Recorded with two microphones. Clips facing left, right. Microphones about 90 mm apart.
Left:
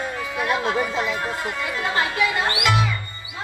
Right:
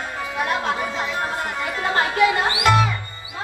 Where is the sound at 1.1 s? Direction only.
25° right (ahead or behind).